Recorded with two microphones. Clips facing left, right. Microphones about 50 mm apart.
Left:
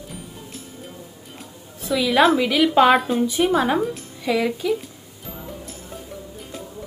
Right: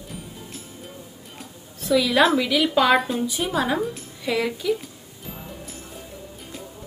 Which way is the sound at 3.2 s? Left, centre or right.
Left.